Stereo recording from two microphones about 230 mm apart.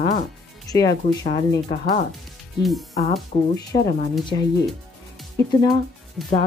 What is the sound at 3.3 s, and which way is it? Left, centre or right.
Speech, left.